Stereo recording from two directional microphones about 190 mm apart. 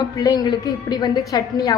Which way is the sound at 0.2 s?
20° left (ahead or behind).